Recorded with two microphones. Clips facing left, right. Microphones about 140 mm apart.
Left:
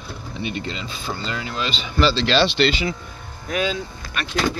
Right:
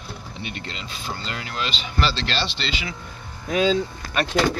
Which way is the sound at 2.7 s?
35° left (ahead or behind).